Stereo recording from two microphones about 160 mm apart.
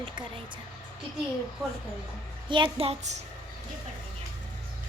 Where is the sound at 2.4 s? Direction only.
30° right (ahead or behind).